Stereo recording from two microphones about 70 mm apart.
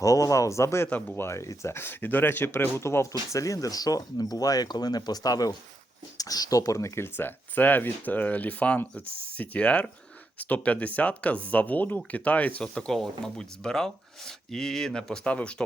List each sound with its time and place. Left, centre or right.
0.0 s speech: left
2.8 s speech: left; by 15.6 s centre